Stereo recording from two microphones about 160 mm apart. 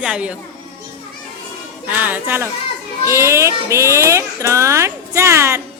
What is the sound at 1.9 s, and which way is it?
Speech, 10° right (ahead or behind).